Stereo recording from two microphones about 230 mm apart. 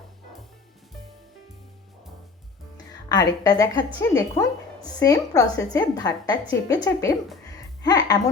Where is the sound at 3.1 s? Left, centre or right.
Centre.